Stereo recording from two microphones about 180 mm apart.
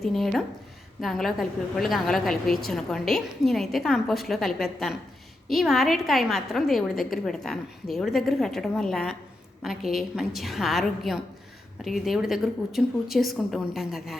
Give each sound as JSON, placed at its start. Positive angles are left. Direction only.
{"t": 0.0, "sound": "a woman's voice", "side_deg": 0}